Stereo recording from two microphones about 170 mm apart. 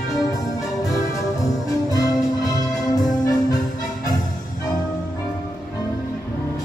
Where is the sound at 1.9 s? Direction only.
20° left (ahead or behind).